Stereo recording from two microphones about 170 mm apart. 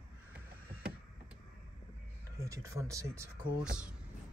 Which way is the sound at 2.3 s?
15° right (ahead or behind).